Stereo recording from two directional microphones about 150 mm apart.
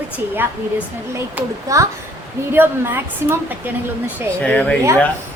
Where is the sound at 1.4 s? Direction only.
10° right (ahead or behind).